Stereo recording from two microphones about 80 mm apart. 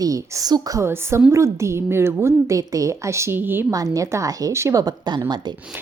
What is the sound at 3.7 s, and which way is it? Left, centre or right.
Speech, right.